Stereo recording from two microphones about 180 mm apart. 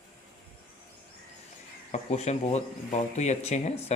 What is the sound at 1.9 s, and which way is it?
Speech, 40° left (ahead or behind).